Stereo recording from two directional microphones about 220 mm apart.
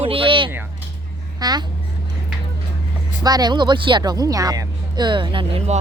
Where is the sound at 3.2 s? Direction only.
15° right (ahead or behind).